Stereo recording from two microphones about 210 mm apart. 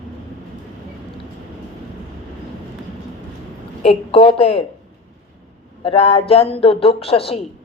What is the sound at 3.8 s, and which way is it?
Speech, 25° left (ahead or behind).